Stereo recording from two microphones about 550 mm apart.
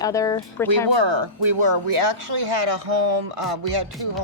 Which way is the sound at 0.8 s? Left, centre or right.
Right.